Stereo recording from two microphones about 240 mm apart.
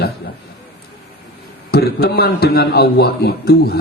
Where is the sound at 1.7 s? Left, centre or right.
Left.